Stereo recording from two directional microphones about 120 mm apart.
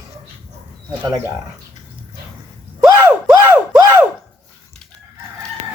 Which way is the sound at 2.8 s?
20° right (ahead or behind).